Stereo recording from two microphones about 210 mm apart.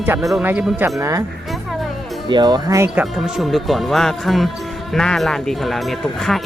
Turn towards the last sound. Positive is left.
turn(degrees=0)  # may be behind; listen again after turning